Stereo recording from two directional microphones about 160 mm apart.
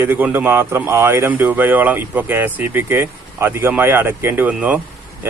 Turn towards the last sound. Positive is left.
turn(degrees=-10)  # may be behind; listen again after turning